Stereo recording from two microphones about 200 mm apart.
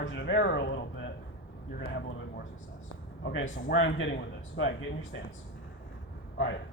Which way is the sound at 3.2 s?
70° left (ahead or behind).